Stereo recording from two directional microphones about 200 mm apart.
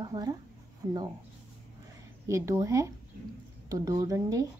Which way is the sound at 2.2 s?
15° right (ahead or behind).